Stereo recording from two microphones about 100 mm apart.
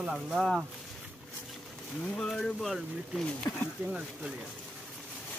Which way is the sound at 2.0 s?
10° left (ahead or behind).